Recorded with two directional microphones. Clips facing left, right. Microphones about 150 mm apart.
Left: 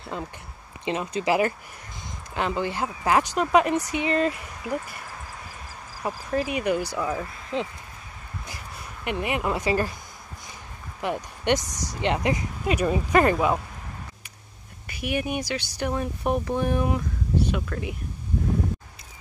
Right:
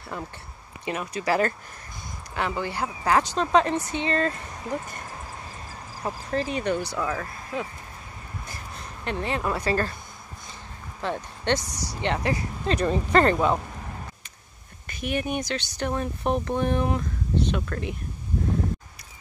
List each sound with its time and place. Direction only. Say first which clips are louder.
0.0 s speech: left 2 dB; 20° left (ahead or behind)
6.0 s speech: left 1 dB; 10° left (ahead or behind)
8.5 s a sound: even; 15° left (ahead or behind)
11.0 s speech: left 1 dB; 15° left (ahead or behind)
14.9 s speech: even; 10° left (ahead or behind)